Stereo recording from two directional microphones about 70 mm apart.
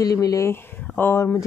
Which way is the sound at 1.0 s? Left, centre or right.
Left.